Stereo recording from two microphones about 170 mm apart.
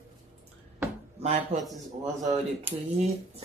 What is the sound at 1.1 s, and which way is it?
Speech, 40° right (ahead or behind).